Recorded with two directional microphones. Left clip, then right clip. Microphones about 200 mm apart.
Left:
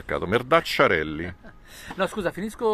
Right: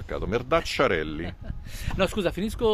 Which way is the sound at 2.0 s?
35° right (ahead or behind).